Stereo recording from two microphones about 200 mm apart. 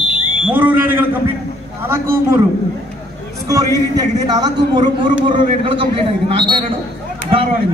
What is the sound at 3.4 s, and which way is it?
A man's voice, 20° right (ahead or behind).